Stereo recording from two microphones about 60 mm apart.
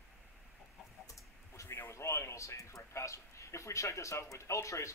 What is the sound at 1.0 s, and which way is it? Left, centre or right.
Speech, left.